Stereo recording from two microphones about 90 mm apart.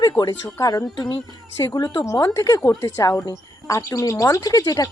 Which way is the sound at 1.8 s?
55° left (ahead or behind).